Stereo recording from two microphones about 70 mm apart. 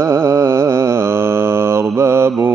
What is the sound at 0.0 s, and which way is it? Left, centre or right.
Mantra, right.